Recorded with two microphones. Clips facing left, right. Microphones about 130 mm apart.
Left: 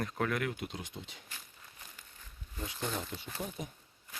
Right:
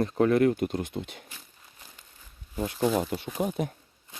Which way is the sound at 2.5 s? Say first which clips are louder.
Right 11 dB; 60° right (ahead or behind).